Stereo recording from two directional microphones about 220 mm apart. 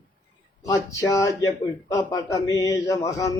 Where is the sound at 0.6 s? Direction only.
15° left (ahead or behind).